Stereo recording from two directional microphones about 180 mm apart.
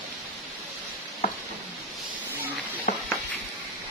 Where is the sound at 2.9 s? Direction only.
50° left (ahead or behind).